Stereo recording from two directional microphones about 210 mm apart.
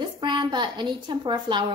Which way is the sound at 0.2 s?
20° right (ahead or behind).